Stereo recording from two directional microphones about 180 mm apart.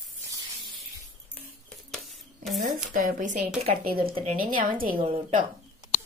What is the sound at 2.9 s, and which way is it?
Speech, 45° right (ahead or behind).